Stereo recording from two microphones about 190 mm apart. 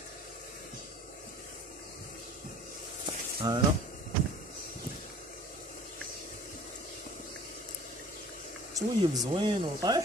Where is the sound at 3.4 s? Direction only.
20° right (ahead or behind).